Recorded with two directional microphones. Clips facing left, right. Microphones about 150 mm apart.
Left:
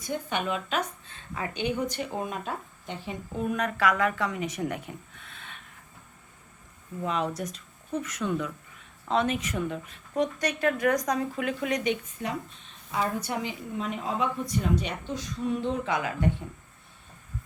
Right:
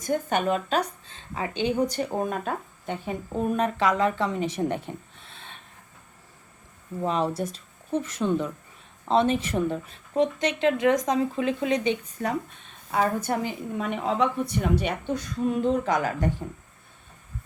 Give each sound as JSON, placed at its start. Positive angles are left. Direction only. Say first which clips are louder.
{"t": 0.0, "sound": "speech", "louder": "right 6 dB", "side_deg": -45}
{"t": 3.6, "sound": "speech", "louder": "right 2 dB", "side_deg": -25}
{"t": 7.0, "sound": "speech", "louder": "right 4 dB", "side_deg": -30}
{"t": 12.2, "sound": "speech", "louder": "right 5 dB", "side_deg": -40}
{"t": 13.9, "sound": "a woman's voice", "louder": "right 6 dB", "side_deg": -65}